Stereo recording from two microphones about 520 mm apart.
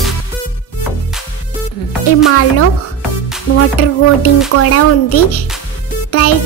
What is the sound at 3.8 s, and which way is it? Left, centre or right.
Music, left.